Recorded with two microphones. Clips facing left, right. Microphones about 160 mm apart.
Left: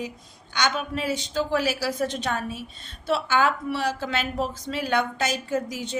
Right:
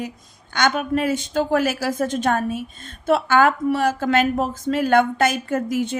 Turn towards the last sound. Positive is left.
turn(degrees=-55)  # may be behind; listen again after turning